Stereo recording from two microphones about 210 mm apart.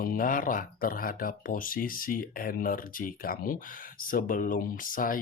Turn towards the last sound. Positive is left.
turn(degrees=40)  # may be behind; listen again after turning